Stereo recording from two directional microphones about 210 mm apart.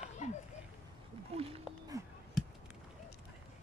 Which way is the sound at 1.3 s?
30° right (ahead or behind).